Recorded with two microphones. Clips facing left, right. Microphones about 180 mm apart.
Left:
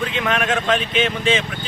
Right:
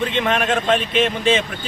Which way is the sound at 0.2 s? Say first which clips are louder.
Right 1 dB; 30° right (ahead or behind).